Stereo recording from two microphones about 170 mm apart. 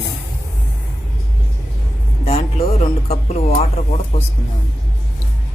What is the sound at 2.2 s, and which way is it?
Speech, 35° left (ahead or behind).